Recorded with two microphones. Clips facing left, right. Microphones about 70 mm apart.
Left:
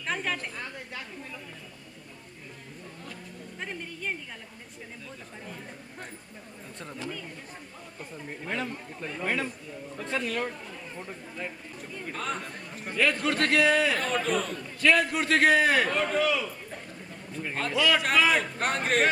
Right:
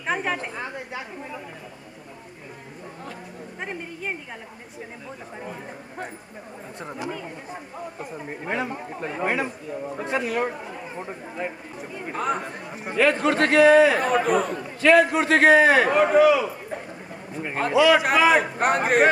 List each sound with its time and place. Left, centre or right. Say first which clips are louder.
0.0 s chatter: right 5 dB; centre
3.6 s speech: right 4 dB; right
7.0 s speech: right 6 dB; centre
13.6 s a man's voice: right 12 dB; centre